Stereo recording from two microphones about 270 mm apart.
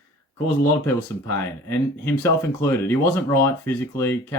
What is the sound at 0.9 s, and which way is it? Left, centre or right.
Speech, centre.